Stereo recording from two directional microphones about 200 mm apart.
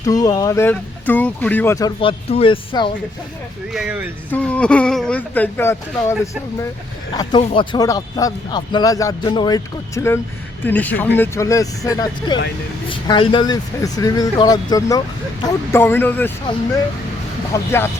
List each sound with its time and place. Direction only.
0.0 s speech: 20° left (ahead or behind)
2.0 s a man's voice: 25° left (ahead or behind)
3.7 s speech: 5° right (ahead or behind)
4.3 s speech: 5° left (ahead or behind)
7.2 s a man's voice: 25° left (ahead or behind)
17.5 s speech: 10° left (ahead or behind)